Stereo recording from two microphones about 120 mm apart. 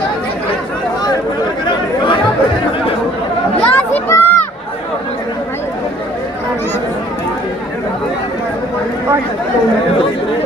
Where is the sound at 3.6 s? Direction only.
15° left (ahead or behind).